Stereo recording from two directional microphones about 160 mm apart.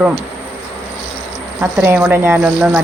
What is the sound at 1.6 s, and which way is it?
Speech, 10° right (ahead or behind).